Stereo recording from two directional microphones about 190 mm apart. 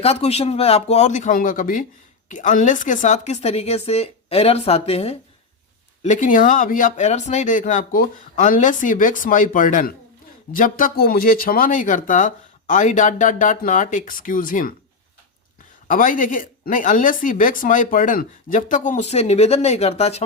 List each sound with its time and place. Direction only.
0.0 s a woman's voice: 35° left (ahead or behind)
15.9 s speech: 45° left (ahead or behind)